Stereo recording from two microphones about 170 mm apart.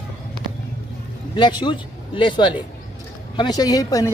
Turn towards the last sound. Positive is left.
turn(degrees=20)  # may be behind; listen again after turning